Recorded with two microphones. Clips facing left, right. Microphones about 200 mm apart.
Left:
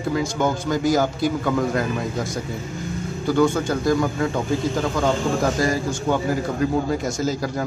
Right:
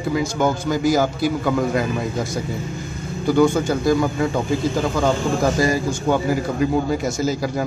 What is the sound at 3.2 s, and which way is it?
A man's voice, 10° right (ahead or behind).